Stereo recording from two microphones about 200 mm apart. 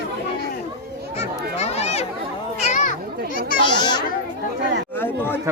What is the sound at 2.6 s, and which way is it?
Children playing, 35° left (ahead or behind).